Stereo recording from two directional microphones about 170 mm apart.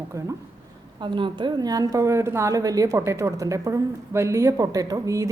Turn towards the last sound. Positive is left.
turn(degrees=-20)  # may be behind; listen again after turning